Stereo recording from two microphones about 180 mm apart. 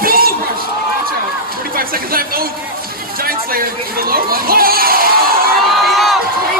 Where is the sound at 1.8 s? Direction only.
55° right (ahead or behind).